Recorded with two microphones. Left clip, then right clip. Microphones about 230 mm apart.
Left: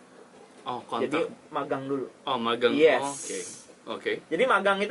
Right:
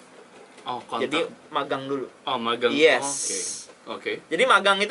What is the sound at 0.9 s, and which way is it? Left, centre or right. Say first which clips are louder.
A man's voice: right 2 dB; centre.